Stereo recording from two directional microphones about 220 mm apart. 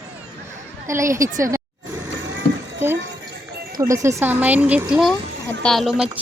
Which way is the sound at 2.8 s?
10° right (ahead or behind).